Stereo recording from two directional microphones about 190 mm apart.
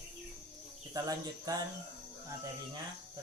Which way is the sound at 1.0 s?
20° right (ahead or behind).